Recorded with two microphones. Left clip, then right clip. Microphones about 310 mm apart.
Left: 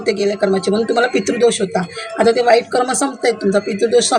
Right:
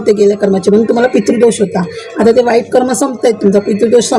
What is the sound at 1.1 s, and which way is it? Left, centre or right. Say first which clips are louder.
Speech: right 5 dB; left.